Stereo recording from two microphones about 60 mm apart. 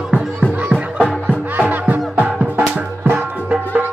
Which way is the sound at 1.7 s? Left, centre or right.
Right.